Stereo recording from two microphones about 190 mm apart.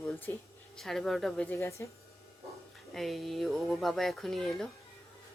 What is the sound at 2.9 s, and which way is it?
A woman's voice, centre (ahead or behind).